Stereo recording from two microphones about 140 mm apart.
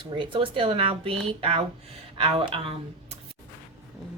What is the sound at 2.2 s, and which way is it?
Speech, 45° right (ahead or behind).